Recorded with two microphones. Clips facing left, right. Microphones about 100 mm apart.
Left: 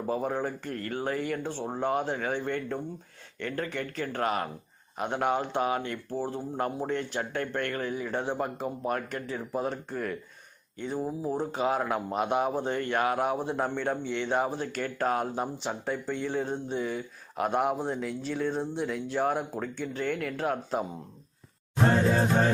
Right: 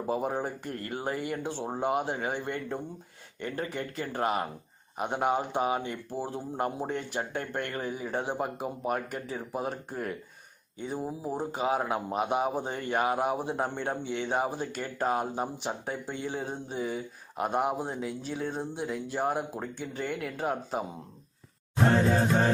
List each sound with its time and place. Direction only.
0.1 s speech: 15° right (ahead or behind)